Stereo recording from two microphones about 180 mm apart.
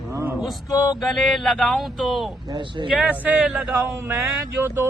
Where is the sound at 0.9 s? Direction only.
Centre (ahead or behind).